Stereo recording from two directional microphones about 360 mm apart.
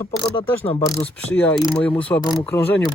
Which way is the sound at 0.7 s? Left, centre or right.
Centre.